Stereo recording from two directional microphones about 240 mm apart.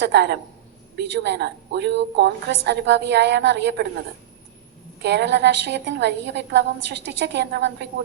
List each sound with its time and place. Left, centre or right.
0.0 s a woman's voice: right
5.0 s a woman's voice: right